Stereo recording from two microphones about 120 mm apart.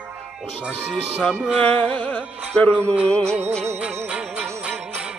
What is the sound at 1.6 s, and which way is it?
Music, 15° left (ahead or behind).